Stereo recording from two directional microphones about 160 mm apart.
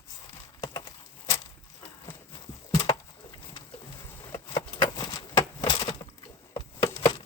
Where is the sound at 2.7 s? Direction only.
25° left (ahead or behind).